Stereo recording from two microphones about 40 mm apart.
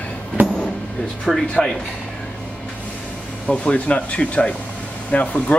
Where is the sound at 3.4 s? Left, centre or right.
Left.